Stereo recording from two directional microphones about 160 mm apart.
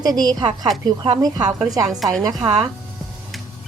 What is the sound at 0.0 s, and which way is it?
Speech, 25° right (ahead or behind).